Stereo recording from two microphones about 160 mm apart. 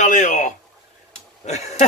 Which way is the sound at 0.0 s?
50° left (ahead or behind).